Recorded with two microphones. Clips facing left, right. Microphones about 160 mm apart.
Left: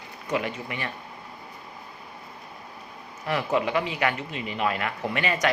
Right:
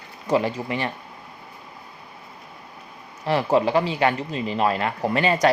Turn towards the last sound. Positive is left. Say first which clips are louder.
# right 6 dB
turn(degrees=-35)  # may be behind; listen again after turning